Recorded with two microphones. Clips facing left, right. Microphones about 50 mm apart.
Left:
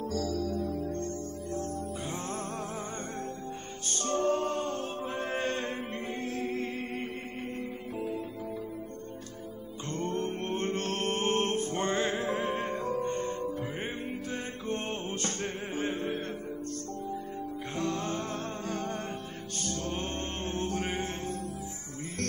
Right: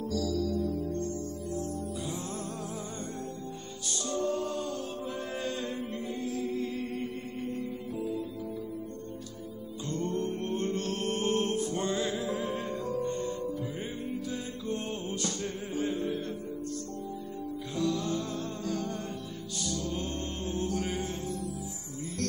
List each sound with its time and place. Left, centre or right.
0.0 s music: left
3.9 s music: left
9.9 s music: left
17.7 s music: left